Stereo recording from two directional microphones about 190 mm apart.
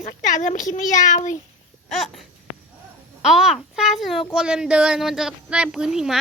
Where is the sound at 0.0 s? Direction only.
40° left (ahead or behind).